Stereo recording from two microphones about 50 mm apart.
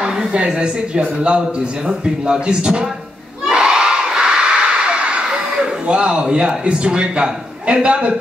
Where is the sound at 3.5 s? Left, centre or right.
Centre.